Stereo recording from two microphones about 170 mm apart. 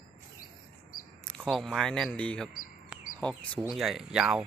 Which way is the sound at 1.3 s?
5° left (ahead or behind).